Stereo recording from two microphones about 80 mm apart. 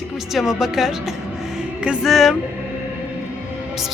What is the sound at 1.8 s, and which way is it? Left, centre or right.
Music, centre.